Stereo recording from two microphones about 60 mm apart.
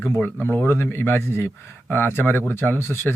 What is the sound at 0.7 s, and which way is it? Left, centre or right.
Speech, left.